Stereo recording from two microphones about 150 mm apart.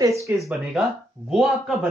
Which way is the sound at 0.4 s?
5° right (ahead or behind).